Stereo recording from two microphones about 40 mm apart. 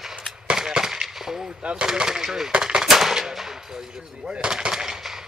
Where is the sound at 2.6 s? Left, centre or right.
Centre.